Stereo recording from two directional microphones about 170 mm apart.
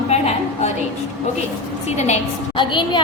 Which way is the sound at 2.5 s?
30° left (ahead or behind).